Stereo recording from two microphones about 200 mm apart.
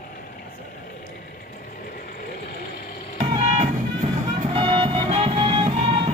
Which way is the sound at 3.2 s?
30° right (ahead or behind).